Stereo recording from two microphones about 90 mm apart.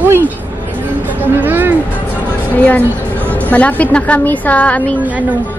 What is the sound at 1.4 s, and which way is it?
Speech, 20° right (ahead or behind).